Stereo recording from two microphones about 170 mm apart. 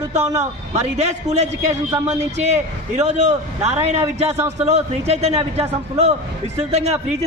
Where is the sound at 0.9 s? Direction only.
40° right (ahead or behind).